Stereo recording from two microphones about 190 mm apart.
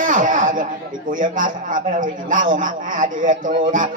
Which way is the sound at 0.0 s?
45° right (ahead or behind).